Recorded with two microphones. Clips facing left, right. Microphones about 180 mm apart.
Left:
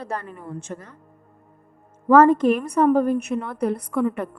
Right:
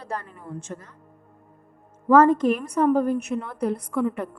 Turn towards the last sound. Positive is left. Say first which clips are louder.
# left 2 dB
turn(degrees=65)  # may be behind; listen again after turning